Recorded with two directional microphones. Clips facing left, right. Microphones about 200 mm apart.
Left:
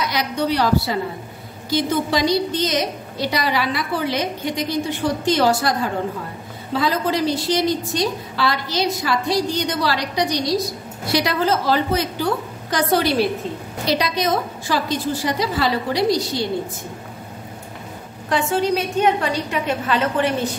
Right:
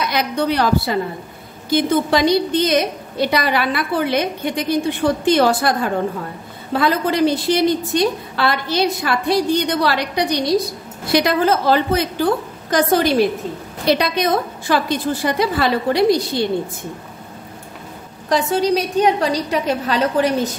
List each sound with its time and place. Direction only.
0.0 s a woman's voice: 55° right (ahead or behind)
6.8 s a woman's voice: 60° right (ahead or behind)
13.8 s a woman's voice: 60° right (ahead or behind)
18.3 s a woman's voice: 35° right (ahead or behind)